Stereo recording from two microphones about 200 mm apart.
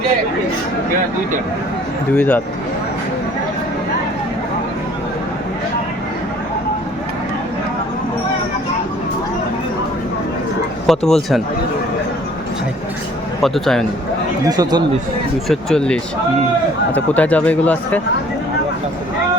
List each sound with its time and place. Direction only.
2.1 s speech: 5° left (ahead or behind)
10.8 s speech: centre (ahead or behind)
13.4 s speech: centre (ahead or behind)
14.4 s speech: 20° right (ahead or behind)
15.4 s speech: 5° left (ahead or behind)